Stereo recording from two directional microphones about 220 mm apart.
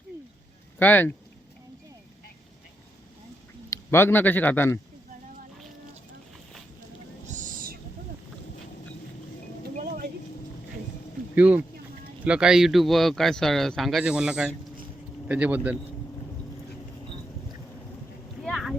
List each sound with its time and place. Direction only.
0.8 s speech: 10° left (ahead or behind)
3.7 s a man's voice: 10° left (ahead or behind)
7.3 s owl: 35° right (ahead or behind)
9.6 s a sound: 45° right (ahead or behind)
11.3 s a man's voice: 5° right (ahead or behind)
18.4 s a sound: centre (ahead or behind)